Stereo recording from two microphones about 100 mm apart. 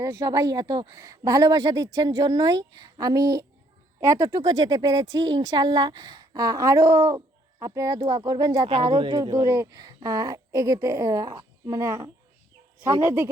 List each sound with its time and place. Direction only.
0.0 s speech: 30° right (ahead or behind)
8.6 s speech: 55° right (ahead or behind); by 12.1 s 35° right (ahead or behind)
13.0 s a woman's voice: 25° right (ahead or behind)